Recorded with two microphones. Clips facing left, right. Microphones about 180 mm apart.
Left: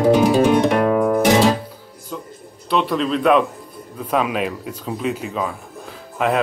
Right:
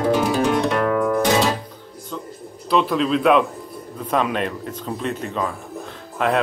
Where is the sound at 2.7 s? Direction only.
Centre (ahead or behind).